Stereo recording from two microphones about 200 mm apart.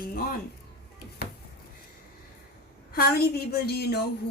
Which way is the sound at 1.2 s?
50° left (ahead or behind).